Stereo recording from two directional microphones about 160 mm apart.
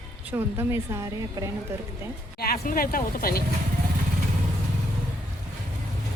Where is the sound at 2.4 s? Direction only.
65° left (ahead or behind).